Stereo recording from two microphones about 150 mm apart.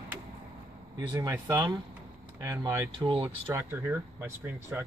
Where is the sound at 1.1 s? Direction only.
25° right (ahead or behind).